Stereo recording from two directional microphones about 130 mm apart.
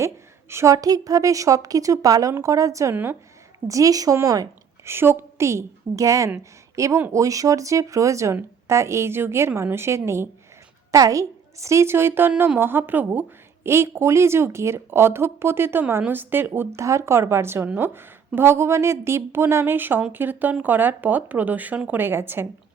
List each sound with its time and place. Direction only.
0.5 s a woman's voice: 25° right (ahead or behind)
3.7 s a woman's voice: 25° right (ahead or behind)